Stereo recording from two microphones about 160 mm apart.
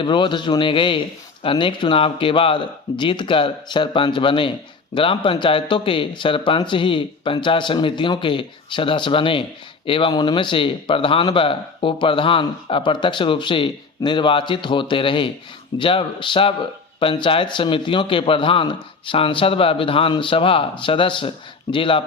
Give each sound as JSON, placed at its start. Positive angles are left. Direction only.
{"t": 0.0, "sound": "speech", "side_deg": 30}